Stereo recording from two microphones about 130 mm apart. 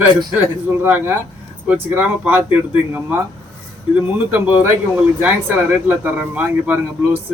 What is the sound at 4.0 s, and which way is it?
Speech, 10° right (ahead or behind).